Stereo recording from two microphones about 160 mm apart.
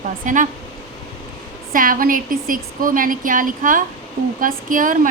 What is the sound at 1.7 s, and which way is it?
Speech, 60° right (ahead or behind).